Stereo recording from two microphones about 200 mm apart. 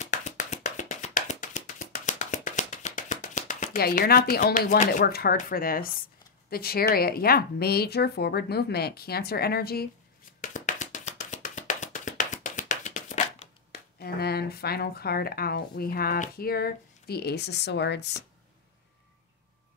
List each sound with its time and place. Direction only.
0.0 s a sound: 35° left (ahead or behind)
6.5 s speech: 50° left (ahead or behind)
10.4 s tap: 35° left (ahead or behind)
13.9 s speech: 50° left (ahead or behind)